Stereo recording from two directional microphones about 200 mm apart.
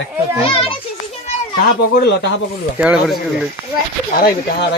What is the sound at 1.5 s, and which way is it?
Speech, 50° left (ahead or behind).